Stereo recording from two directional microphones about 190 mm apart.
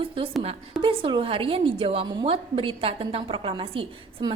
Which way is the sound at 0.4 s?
25° right (ahead or behind).